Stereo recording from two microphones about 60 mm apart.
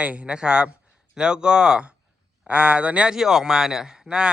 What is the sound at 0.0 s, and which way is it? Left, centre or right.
Speech, right.